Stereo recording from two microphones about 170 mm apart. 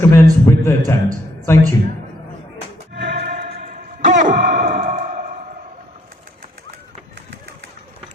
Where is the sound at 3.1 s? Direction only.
35° right (ahead or behind).